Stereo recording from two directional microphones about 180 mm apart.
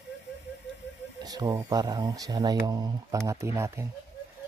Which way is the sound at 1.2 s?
20° right (ahead or behind).